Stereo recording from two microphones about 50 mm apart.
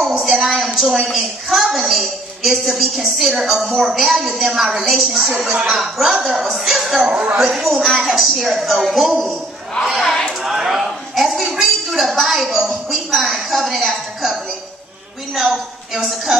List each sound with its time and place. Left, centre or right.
0.0 s a woman's voice: centre
7.0 s a woman's voice: right
7.3 s a woman's voice: centre
10.4 s a woman's voice: centre
16.0 s a woman's voice: centre